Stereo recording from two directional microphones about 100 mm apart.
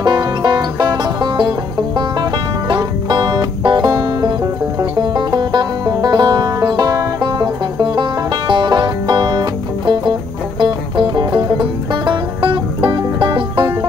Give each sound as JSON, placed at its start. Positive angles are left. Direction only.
{"t": 0.0, "sound": "music", "side_deg": -45}
{"t": 2.7, "sound": "music", "side_deg": -45}